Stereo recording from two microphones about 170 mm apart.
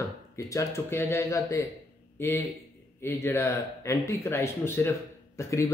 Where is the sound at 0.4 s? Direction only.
20° left (ahead or behind).